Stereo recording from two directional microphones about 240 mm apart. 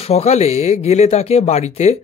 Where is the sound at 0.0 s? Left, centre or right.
Left.